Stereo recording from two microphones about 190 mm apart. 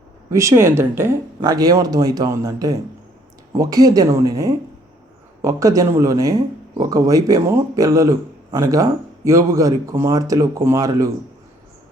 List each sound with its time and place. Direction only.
0.3 s speech: 15° right (ahead or behind)